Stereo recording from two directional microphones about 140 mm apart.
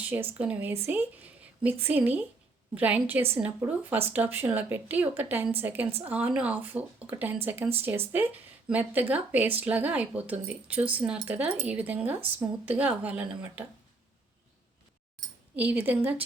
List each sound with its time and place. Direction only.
0.0 s speech: 15° right (ahead or behind)
15.5 s speech: 10° right (ahead or behind)